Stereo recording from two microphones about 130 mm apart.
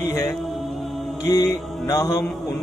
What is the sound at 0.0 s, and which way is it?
Music, 30° left (ahead or behind).